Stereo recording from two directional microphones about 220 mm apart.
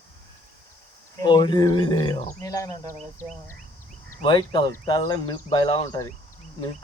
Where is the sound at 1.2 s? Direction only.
20° left (ahead or behind).